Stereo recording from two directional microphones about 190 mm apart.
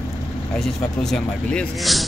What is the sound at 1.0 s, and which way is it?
Speech, 5° left (ahead or behind).